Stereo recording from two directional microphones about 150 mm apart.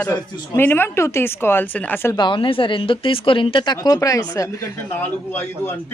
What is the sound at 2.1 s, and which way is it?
Speech, 30° left (ahead or behind).